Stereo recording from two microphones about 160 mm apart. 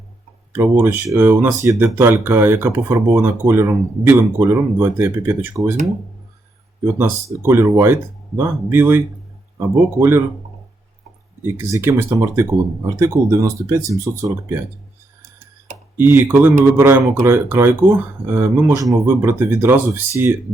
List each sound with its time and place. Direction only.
0.5 s speech: 15° right (ahead or behind)
6.8 s speech: 15° right (ahead or behind)
11.5 s speech: 15° right (ahead or behind)
16.0 s speech: 15° right (ahead or behind)